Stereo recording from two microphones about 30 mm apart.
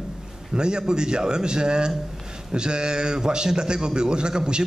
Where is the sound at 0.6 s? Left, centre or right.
Right.